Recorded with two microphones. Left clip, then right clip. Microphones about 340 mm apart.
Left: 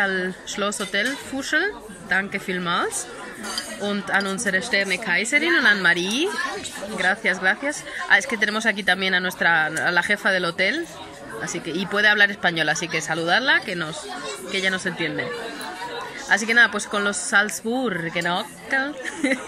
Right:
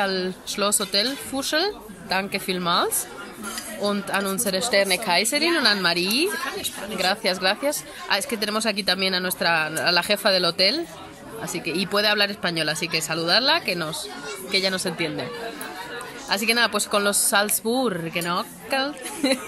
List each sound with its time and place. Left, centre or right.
0.0 s speech: centre
5.9 s a woman's voice: right
7.0 s speech: centre
11.9 s speech: centre
16.3 s speech: centre